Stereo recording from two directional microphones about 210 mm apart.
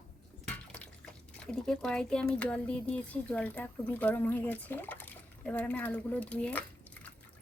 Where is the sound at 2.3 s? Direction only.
5° left (ahead or behind).